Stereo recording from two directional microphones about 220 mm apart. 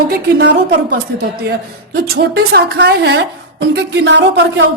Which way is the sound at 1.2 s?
45° right (ahead or behind).